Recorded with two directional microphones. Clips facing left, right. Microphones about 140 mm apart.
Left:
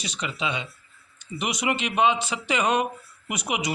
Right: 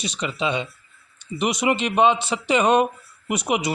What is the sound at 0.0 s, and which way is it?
A man's voice, 20° right (ahead or behind).